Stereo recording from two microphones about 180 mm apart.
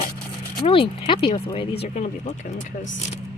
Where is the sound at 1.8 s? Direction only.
40° left (ahead or behind).